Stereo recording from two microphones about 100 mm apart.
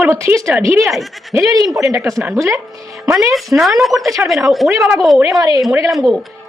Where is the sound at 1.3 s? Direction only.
35° right (ahead or behind).